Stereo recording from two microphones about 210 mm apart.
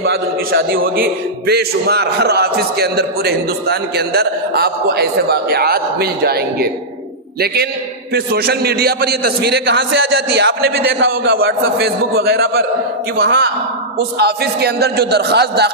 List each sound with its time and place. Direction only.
0.0 s a man's voice: 50° right (ahead or behind)
8.1 s a man's voice: 50° right (ahead or behind)